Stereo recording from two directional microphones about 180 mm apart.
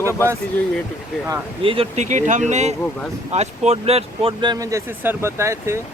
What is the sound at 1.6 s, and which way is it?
Speech, 35° right (ahead or behind).